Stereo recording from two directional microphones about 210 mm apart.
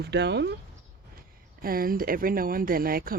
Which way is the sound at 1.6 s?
45° right (ahead or behind).